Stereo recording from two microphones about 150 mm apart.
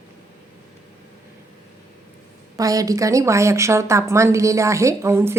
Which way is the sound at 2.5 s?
25° right (ahead or behind).